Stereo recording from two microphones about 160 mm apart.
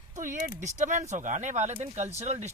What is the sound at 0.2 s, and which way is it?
Speech, 50° right (ahead or behind).